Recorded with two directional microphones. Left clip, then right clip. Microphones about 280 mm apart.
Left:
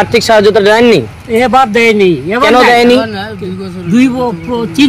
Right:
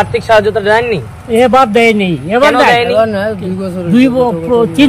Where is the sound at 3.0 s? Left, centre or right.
Right.